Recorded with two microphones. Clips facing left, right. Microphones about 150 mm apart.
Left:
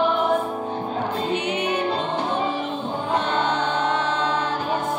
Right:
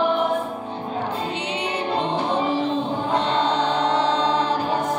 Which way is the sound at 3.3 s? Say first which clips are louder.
Right 2 dB; 35° right (ahead or behind).